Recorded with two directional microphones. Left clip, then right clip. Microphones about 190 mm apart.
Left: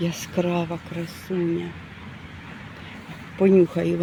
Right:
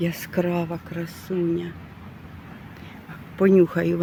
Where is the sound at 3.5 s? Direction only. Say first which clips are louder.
Even; centre (ahead or behind).